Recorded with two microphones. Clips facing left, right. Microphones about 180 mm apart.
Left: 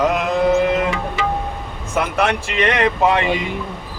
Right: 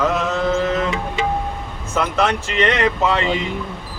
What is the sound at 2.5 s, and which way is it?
Speech, 10° left (ahead or behind).